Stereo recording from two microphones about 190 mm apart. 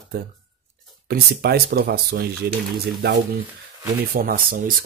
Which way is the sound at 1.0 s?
55° right (ahead or behind).